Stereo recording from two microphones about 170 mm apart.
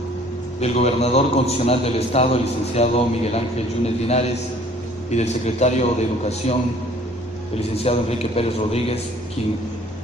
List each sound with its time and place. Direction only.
0.6 s a man's voice: 40° left (ahead or behind)
7.7 s a man's voice: 35° left (ahead or behind)